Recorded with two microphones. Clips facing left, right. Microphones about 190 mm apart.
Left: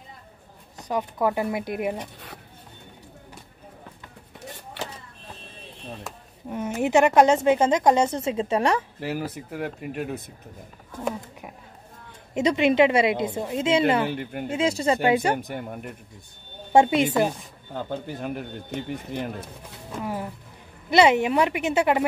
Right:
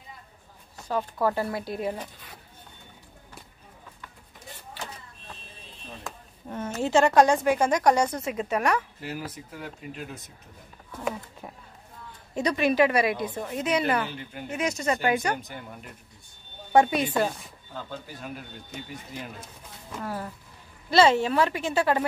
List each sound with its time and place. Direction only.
0.7 s speech: 15° left (ahead or behind)
6.5 s a woman's voice: 15° left (ahead or behind)
9.0 s speech: 65° left (ahead or behind)
12.4 s a woman's voice: 20° left (ahead or behind)
14.0 s speech: 60° left (ahead or behind)
14.5 s a woman's voice: 30° left (ahead or behind)
15.3 s speech: 55° left (ahead or behind)
16.7 s a woman's voice: 25° left (ahead or behind)
18.0 s speech: 60° left (ahead or behind)
20.0 s a woman's voice: 15° left (ahead or behind)